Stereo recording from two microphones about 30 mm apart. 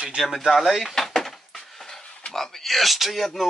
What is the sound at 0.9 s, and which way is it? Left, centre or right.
Dishes, centre.